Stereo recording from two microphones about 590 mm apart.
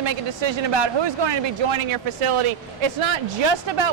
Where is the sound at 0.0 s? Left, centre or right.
Right.